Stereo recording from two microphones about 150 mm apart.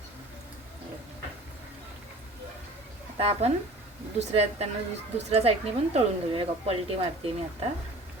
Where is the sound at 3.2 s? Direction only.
45° right (ahead or behind).